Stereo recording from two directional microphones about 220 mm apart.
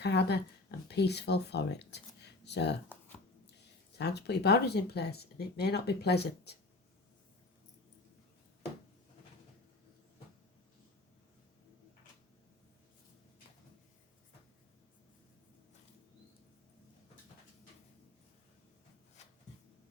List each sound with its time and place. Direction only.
0.0 s speech: 50° left (ahead or behind)
3.9 s speech: 50° left (ahead or behind)